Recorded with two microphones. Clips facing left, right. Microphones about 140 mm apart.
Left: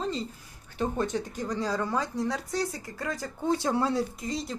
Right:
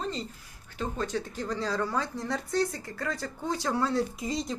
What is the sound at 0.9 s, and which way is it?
Speech, 20° left (ahead or behind).